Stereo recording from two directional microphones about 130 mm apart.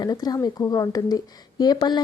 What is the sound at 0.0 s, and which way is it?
Speech, 30° left (ahead or behind).